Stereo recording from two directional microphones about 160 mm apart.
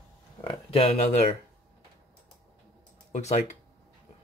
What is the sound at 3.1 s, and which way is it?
Speech, 45° left (ahead or behind).